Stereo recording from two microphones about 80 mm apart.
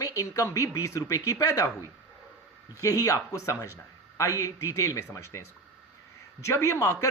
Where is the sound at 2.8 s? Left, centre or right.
Left.